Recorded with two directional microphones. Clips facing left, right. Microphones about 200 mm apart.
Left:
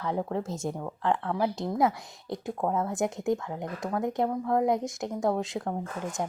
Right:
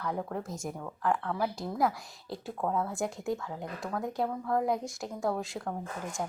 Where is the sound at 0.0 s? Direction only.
25° left (ahead or behind).